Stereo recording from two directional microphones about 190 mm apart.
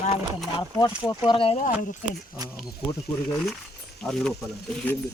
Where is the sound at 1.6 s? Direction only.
45° left (ahead or behind).